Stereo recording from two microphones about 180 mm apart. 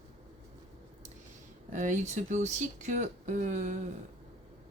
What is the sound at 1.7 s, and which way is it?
Speech, 45° right (ahead or behind).